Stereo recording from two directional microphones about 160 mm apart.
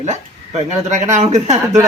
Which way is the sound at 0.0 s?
45° right (ahead or behind).